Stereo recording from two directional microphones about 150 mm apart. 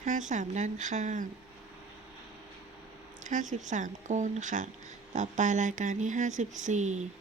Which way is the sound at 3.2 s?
55° right (ahead or behind).